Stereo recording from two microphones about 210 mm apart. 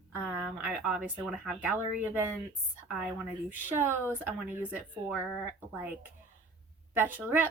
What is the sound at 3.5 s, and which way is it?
Speech, 10° right (ahead or behind).